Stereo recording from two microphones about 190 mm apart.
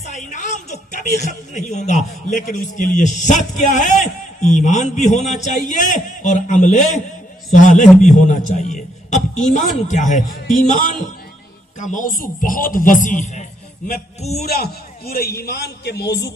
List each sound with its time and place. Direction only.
0.0 s a woman's voice: 40° left (ahead or behind)
14.4 s a man's voice: 55° left (ahead or behind)